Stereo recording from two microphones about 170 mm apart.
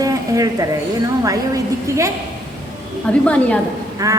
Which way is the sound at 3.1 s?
5° left (ahead or behind).